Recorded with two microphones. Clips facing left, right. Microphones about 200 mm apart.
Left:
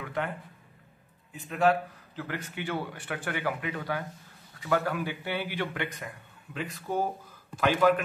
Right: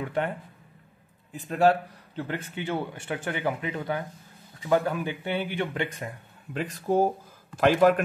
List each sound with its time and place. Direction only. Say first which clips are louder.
0.0 s speech: right 5 dB; 30° right (ahead or behind)
1.3 s a man's voice: right 3 dB; 40° right (ahead or behind)